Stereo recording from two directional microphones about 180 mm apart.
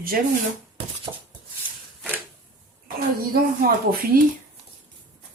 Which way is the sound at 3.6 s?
60° right (ahead or behind).